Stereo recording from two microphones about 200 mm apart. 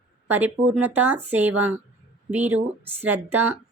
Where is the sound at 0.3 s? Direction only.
10° right (ahead or behind).